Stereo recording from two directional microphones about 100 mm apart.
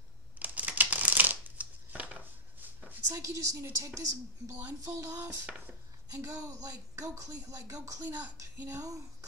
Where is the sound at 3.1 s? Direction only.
30° right (ahead or behind).